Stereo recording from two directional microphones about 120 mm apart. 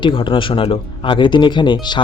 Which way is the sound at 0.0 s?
45° left (ahead or behind).